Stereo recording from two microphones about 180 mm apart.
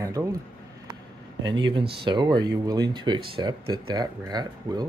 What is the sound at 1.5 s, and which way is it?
Speech, 25° right (ahead or behind).